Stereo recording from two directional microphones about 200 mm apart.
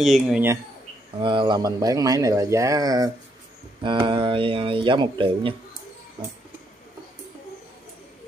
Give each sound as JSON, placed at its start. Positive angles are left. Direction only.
{"t": 0.0, "sound": "speech", "side_deg": 0}
{"t": 1.2, "sound": "speech", "side_deg": -25}